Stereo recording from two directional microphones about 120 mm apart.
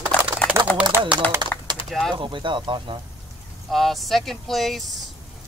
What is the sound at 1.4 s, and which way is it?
Typing, 40° right (ahead or behind).